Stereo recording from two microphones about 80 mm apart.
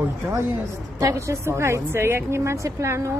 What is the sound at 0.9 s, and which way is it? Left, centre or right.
A woman's voice, right.